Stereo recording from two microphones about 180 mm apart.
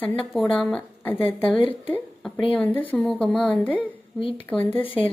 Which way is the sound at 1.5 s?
30° left (ahead or behind).